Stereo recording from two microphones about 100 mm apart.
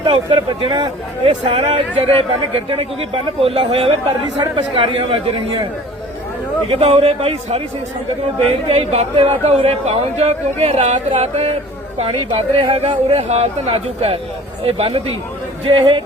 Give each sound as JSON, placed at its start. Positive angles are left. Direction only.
{"t": 0.0, "sound": "speech", "side_deg": -55}
{"t": 6.7, "sound": "a woman's voice", "side_deg": -80}
{"t": 11.9, "sound": "speech", "side_deg": -70}
{"t": 14.6, "sound": "speech", "side_deg": -75}
{"t": 15.7, "sound": "speech", "side_deg": -55}